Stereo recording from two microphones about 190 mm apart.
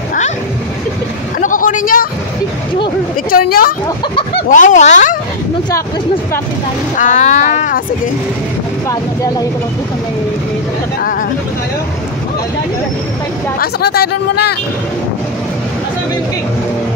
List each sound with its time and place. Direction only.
1.4 s vehicle: 45° left (ahead or behind)
3.3 s speech: 50° left (ahead or behind)
7.0 s speech: 40° left (ahead or behind)
13.6 s speech: 55° left (ahead or behind)